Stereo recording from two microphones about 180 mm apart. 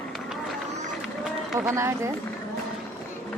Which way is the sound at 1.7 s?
15° right (ahead or behind).